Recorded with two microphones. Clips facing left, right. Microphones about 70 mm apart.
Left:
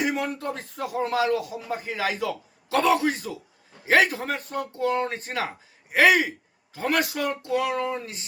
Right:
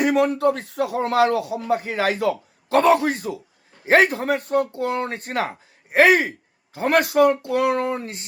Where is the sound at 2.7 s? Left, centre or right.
Right.